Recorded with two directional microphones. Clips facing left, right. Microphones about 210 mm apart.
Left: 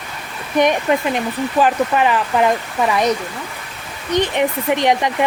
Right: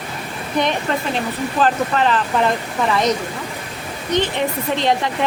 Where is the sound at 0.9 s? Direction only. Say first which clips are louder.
Left 3 dB; 15° left (ahead or behind).